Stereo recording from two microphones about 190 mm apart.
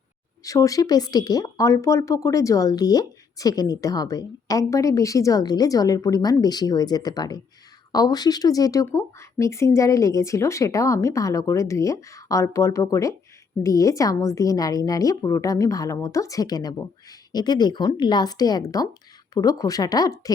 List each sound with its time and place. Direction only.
0.4 s speech: 15° left (ahead or behind)